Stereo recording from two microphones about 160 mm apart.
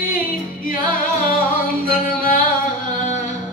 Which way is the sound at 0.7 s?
60° left (ahead or behind).